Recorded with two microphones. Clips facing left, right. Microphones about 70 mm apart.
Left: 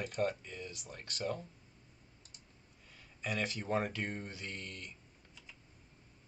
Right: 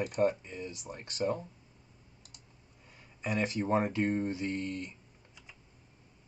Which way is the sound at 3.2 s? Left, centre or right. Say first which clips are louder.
Right 6 dB; right.